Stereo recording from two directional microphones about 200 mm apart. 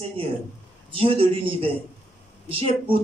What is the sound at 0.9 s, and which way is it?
Speech, 25° right (ahead or behind).